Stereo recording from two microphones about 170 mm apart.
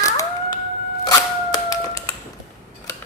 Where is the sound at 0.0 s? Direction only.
20° left (ahead or behind).